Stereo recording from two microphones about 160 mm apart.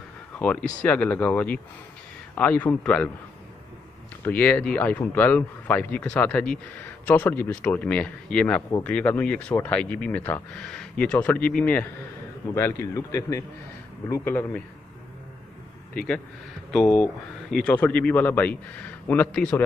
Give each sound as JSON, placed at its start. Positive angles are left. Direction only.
{"t": 0.4, "sound": "speech", "side_deg": 10}
{"t": 4.2, "sound": "speech", "side_deg": 10}
{"t": 16.7, "sound": "speech", "side_deg": 5}